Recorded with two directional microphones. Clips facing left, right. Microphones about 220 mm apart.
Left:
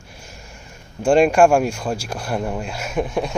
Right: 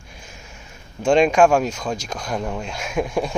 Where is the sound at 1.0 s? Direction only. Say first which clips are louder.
Left 1 dB; 10° left (ahead or behind).